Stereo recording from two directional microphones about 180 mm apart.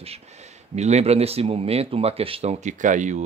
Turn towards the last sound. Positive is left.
turn(degrees=-40)  # may be behind; listen again after turning